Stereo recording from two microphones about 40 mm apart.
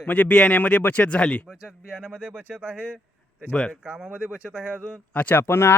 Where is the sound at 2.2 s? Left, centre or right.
Right.